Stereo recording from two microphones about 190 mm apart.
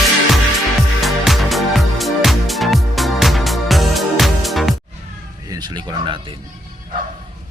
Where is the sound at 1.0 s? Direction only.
Centre (ahead or behind).